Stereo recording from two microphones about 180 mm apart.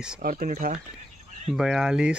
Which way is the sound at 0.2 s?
50° right (ahead or behind).